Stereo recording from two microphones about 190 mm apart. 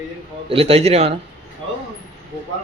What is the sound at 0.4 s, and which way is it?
Speech, 30° right (ahead or behind).